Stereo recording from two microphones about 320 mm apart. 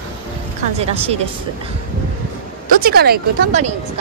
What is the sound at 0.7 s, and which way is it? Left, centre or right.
Speech, centre.